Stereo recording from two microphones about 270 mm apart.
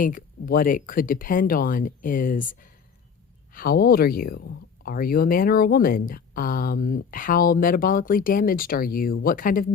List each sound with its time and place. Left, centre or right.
0.0 s speech: left